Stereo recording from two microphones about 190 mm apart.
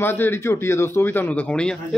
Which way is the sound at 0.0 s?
10° left (ahead or behind).